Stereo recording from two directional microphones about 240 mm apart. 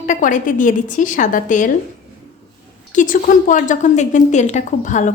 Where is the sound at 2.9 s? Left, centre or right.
Left.